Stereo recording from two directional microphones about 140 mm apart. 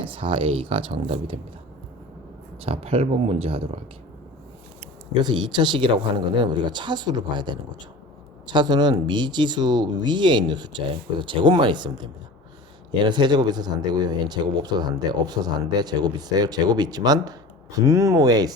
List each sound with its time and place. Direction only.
0.0 s speech: 40° right (ahead or behind)
2.6 s speech: 45° right (ahead or behind)
5.2 s speech: 35° right (ahead or behind)
13.1 s speech: 35° right (ahead or behind)